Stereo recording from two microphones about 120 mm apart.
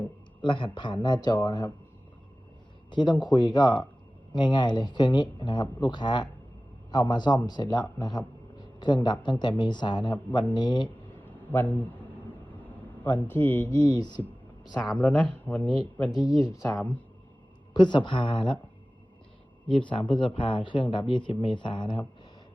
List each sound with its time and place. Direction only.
0.4 s speech: 40° left (ahead or behind)
2.9 s a man's voice: 40° left (ahead or behind)
11.5 s speech: 15° left (ahead or behind)
13.1 s speech: 15° left (ahead or behind)
13.8 s speech: 35° left (ahead or behind)
14.8 s speech: 10° left (ahead or behind)
15.6 s speech: 55° right (ahead or behind)
16.6 s speech: 15° left (ahead or behind)
17.7 s speech: 40° left (ahead or behind)
19.7 s speech: 45° left (ahead or behind)